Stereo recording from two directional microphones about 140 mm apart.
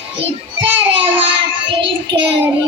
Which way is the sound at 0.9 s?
40° right (ahead or behind).